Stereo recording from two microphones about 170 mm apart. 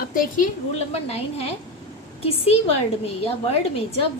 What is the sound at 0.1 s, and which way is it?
Speech, 55° left (ahead or behind).